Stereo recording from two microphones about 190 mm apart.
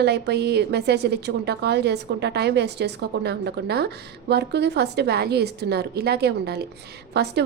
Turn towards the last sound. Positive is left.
turn(degrees=-60)  # may be behind; listen again after turning